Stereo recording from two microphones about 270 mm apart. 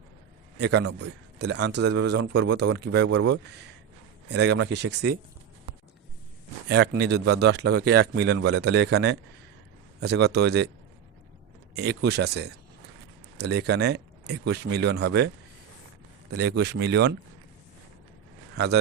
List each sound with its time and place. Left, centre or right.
0.6 s a man's voice: right
6.7 s a man's voice: right
11.8 s a man's voice: right
16.4 s a man's voice: right
18.5 s speech: right